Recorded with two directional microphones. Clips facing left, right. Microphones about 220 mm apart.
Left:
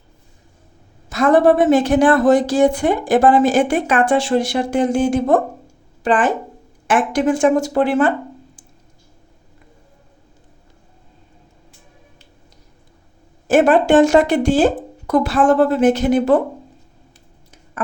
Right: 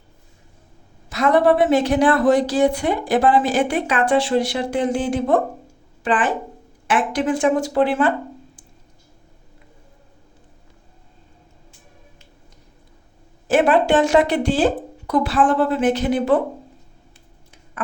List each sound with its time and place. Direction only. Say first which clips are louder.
1.1 s a woman's voice: left 3 dB; 50° left (ahead or behind)
13.5 s a woman's voice: left 4 dB; 45° left (ahead or behind)